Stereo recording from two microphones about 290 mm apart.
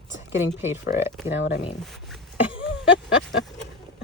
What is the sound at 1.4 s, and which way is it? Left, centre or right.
Speech, left.